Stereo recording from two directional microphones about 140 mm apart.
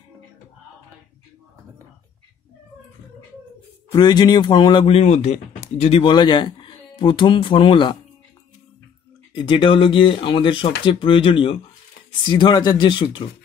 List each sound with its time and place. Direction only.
3.9 s speech: 30° left (ahead or behind)
9.3 s speech: 35° left (ahead or behind)